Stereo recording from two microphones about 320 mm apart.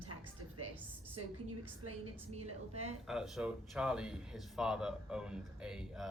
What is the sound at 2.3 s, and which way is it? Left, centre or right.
Speech, centre.